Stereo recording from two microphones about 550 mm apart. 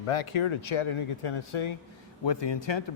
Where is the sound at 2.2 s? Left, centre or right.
Left.